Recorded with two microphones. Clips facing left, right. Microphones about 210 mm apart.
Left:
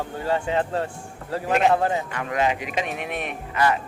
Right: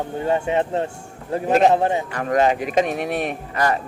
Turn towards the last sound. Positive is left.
turn(degrees=-40)  # may be behind; listen again after turning